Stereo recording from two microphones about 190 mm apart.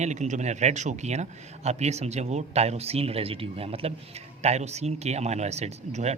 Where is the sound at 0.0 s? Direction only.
40° right (ahead or behind).